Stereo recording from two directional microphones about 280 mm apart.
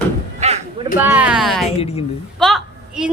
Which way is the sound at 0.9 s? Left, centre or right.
Centre.